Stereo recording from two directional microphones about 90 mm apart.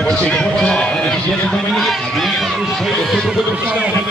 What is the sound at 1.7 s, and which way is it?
Speech, centre (ahead or behind).